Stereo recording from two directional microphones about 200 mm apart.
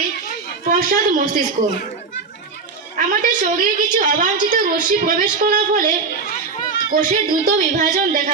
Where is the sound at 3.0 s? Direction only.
45° right (ahead or behind).